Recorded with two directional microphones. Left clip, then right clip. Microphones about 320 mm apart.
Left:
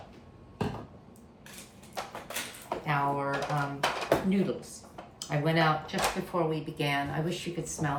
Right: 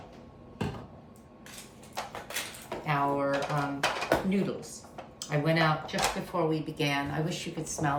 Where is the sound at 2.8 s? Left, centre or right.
Centre.